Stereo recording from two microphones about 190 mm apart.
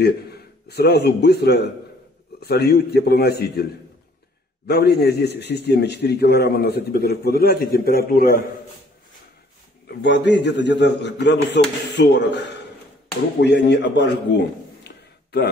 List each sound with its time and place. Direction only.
0.0 s a man's voice: 60° left (ahead or behind)
4.6 s a man's voice: 60° left (ahead or behind)
9.8 s a man's voice: 65° left (ahead or behind)